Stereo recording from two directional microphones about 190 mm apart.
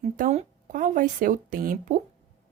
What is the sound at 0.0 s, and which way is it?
Speech, 35° right (ahead or behind).